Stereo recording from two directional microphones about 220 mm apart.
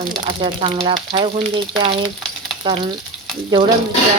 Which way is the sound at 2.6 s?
25° right (ahead or behind).